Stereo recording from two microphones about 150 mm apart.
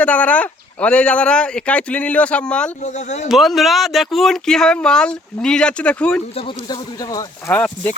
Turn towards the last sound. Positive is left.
turn(degrees=10)  # may be behind; listen again after turning